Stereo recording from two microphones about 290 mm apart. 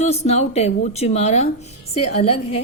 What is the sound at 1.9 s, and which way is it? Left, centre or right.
Speech, left.